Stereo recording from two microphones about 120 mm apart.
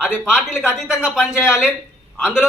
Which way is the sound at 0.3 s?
15° left (ahead or behind).